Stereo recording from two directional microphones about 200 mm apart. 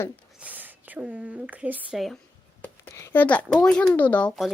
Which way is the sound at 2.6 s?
15° left (ahead or behind).